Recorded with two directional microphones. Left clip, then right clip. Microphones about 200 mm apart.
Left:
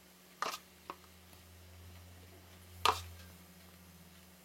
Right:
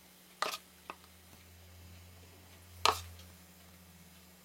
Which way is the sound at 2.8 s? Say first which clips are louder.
Right 1 dB; centre (ahead or behind).